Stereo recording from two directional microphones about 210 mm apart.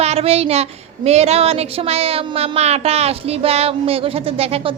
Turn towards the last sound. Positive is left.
turn(degrees=-30)  # may be behind; listen again after turning